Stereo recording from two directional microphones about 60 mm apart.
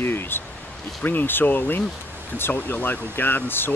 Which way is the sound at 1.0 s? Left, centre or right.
Left.